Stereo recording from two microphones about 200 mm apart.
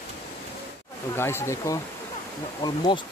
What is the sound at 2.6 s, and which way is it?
Speech, 25° left (ahead or behind).